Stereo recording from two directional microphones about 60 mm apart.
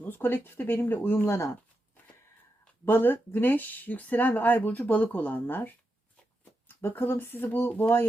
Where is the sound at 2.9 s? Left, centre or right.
Left.